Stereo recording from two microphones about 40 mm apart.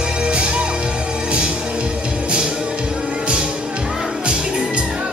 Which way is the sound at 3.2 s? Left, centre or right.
Right.